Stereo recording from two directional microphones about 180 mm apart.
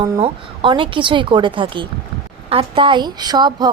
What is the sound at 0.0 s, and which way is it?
A woman's voice, 25° right (ahead or behind).